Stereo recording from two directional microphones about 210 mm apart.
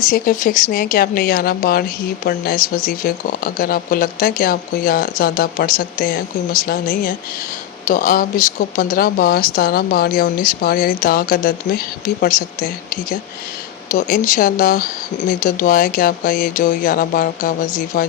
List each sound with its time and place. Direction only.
0.1 s speech: 40° left (ahead or behind)